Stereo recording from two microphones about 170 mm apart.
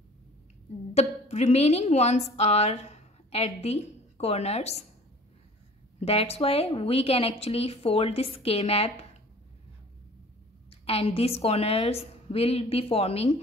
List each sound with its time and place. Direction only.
0.9 s a woman's voice: 40° left (ahead or behind)
5.9 s speech: 35° left (ahead or behind)
10.7 s speech: 35° left (ahead or behind)